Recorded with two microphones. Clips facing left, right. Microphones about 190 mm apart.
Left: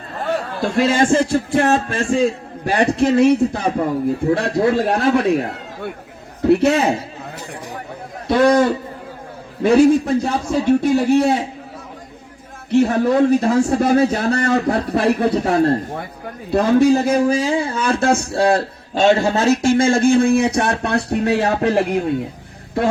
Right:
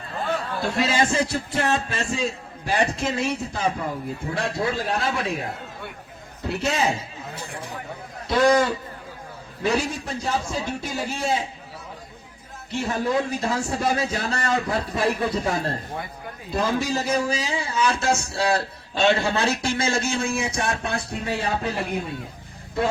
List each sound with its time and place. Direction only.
0.8 s a man's voice: 50° left (ahead or behind)
6.4 s speech: 60° left (ahead or behind)
8.3 s speech: 60° left (ahead or behind)
12.7 s speech: 65° left (ahead or behind)